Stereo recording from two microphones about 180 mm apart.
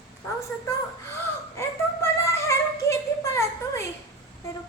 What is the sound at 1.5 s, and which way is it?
Child singing, 15° left (ahead or behind).